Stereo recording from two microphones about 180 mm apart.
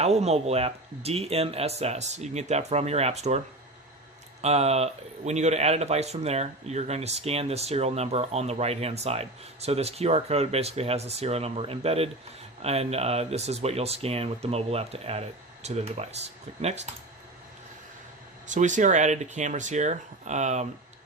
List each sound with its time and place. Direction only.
0.0 s speech: 35° right (ahead or behind)
18.4 s speech: 45° right (ahead or behind)